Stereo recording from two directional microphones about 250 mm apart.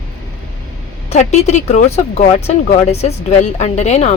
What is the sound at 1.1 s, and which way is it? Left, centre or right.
A woman's voice, left.